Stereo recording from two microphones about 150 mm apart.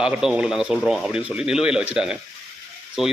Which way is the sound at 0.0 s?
5° right (ahead or behind).